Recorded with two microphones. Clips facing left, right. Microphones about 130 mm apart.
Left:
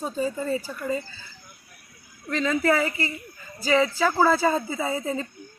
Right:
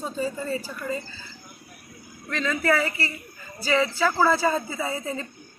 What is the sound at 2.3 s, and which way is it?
A woman's voice, 20° left (ahead or behind).